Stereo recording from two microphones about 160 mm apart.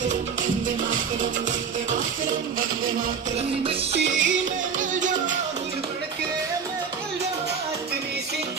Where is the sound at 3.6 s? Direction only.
35° right (ahead or behind).